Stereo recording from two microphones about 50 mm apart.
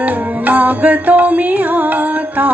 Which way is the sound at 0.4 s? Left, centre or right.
Right.